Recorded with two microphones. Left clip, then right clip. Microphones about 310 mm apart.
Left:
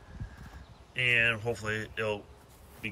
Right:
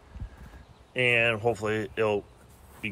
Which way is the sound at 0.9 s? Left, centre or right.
Centre.